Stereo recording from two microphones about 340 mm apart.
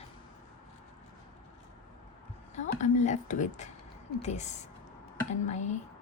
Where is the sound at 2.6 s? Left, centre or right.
Left.